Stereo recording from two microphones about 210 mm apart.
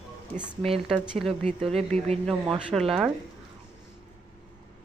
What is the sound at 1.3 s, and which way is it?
Speech, 30° right (ahead or behind).